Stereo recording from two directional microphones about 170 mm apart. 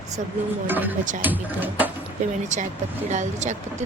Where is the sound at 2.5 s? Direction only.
45° right (ahead or behind).